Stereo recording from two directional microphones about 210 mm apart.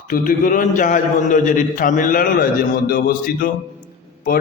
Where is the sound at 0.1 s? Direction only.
40° left (ahead or behind).